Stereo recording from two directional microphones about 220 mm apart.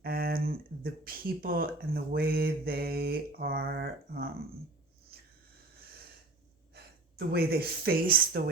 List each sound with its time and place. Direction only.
0.0 s speech: 40° right (ahead or behind)
5.1 s a sound: 45° right (ahead or behind)
6.7 s speech: 45° right (ahead or behind)